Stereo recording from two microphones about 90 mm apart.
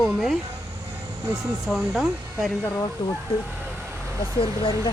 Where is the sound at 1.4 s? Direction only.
Centre (ahead or behind).